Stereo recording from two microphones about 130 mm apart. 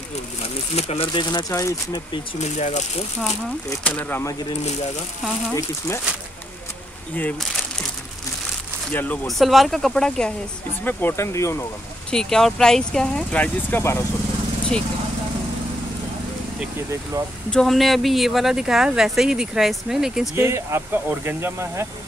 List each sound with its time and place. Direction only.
0.4 s speech: 50° left (ahead or behind); by 2.0 s 25° left (ahead or behind)
2.3 s speech: 65° left (ahead or behind)
3.8 s speech: 15° left (ahead or behind)
5.5 s speech: 20° left (ahead or behind)
8.9 s speech: 15° left (ahead or behind)
9.4 s speech: centre (ahead or behind); by 11.6 s 20° left (ahead or behind)
12.1 s speech: 5° left (ahead or behind)
14.7 s speech: 5° left (ahead or behind)
17.5 s speech: 5° left (ahead or behind)
20.3 s speech: 20° right (ahead or behind)